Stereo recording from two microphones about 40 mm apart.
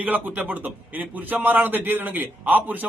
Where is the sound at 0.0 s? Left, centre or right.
Right.